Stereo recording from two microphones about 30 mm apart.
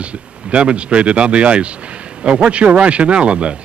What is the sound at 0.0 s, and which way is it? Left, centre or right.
Speech, right.